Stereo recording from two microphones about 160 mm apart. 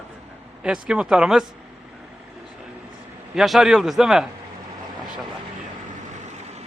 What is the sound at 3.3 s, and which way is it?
Speech, centre (ahead or behind).